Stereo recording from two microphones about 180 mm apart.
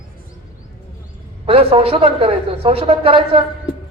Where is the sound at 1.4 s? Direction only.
30° right (ahead or behind).